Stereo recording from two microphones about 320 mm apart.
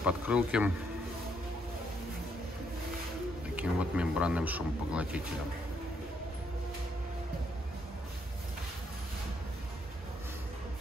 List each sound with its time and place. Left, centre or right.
0.0 s speech: centre
3.5 s speech: centre